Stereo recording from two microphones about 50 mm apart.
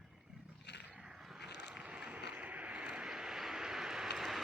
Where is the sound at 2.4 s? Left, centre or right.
Right.